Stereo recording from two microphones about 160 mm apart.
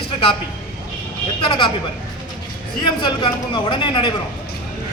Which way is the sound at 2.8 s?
30° left (ahead or behind).